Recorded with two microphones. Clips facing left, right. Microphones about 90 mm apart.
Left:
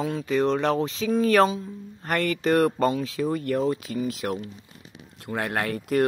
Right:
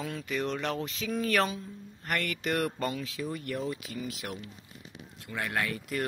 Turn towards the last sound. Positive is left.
turn(degrees=55)  # may be behind; listen again after turning